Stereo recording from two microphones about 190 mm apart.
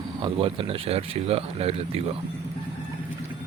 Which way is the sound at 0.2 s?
25° right (ahead or behind).